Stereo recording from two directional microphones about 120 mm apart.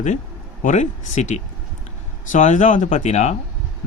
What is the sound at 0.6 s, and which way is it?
Speech, 85° left.